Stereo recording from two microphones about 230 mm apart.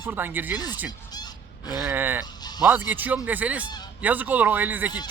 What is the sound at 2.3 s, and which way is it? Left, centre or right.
Music, centre.